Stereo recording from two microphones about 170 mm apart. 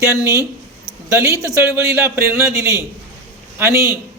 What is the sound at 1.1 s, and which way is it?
A man's voice, 15° right (ahead or behind).